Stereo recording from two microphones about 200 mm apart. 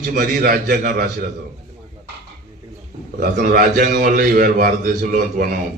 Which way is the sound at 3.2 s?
45° right (ahead or behind).